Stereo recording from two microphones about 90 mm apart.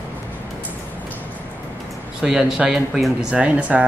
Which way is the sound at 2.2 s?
5° right (ahead or behind).